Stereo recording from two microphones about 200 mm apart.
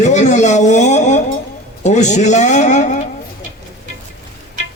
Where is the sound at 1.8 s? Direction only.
35° left (ahead or behind).